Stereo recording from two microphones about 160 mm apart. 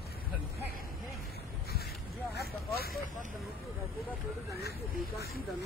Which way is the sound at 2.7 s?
70° left (ahead or behind).